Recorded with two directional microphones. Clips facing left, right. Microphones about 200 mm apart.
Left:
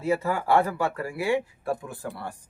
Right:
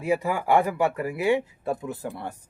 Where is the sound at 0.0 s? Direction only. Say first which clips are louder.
Right 1 dB; 15° right (ahead or behind).